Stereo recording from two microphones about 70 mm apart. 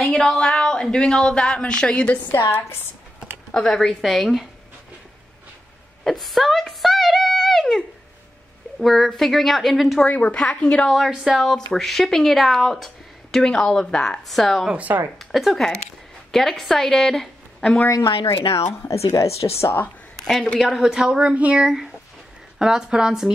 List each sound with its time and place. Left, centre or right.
0.0 s speech: centre
3.5 s speech: centre
6.0 s speech: centre
10.0 s speech: left
11.1 s speech: centre
14.7 s speech: right
15.1 s a woman's voice: centre
17.8 s speech: left
20.2 s a sound: centre
20.6 s a woman's voice: centre